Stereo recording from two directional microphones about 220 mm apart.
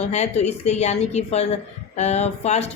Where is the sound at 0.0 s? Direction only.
30° left (ahead or behind).